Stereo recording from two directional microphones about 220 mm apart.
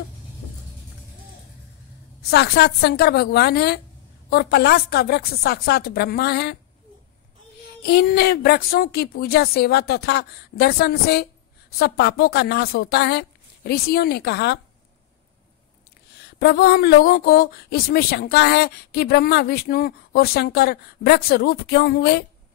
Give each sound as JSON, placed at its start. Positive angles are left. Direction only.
{"t": 2.3, "sound": "speech", "side_deg": 45}
{"t": 7.8, "sound": "speech", "side_deg": 45}
{"t": 16.2, "sound": "speech", "side_deg": 50}